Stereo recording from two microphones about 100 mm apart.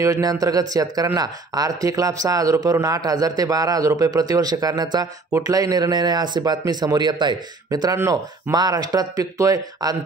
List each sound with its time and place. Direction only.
0.0 s a man's voice: 35° right (ahead or behind)